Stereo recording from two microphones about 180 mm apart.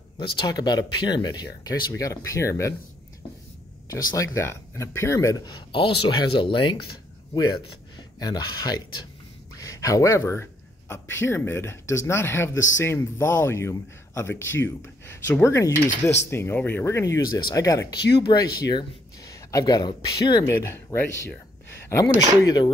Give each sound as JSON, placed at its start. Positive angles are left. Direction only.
{"t": 0.2, "sound": "speech", "side_deg": 25}
{"t": 3.9, "sound": "speech", "side_deg": 15}
{"t": 8.2, "sound": "speech", "side_deg": 20}